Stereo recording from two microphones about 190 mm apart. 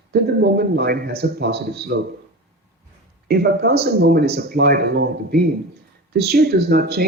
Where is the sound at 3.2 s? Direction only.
55° right (ahead or behind).